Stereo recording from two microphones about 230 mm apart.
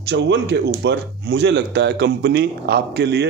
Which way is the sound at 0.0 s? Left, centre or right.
Right.